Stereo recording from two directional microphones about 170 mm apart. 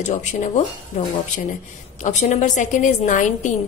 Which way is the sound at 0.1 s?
45° left (ahead or behind).